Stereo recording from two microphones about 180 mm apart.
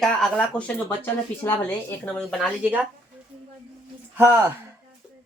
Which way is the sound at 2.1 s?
5° left (ahead or behind).